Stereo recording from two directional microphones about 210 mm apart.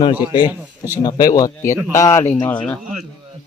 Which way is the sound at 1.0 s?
20° left (ahead or behind).